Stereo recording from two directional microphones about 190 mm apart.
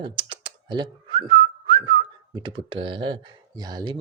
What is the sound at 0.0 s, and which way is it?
Speech, 25° right (ahead or behind).